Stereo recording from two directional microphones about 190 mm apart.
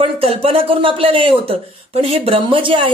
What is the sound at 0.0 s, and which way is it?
A woman's voice, 30° right (ahead or behind).